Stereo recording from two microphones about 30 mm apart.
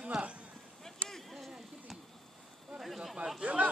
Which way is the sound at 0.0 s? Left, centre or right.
Right.